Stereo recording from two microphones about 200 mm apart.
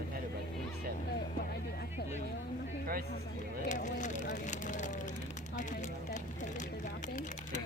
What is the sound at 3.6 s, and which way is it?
Speech, 40° left (ahead or behind).